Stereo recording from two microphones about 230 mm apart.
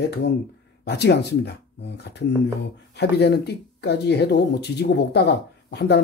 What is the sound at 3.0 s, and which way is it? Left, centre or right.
Speech, left.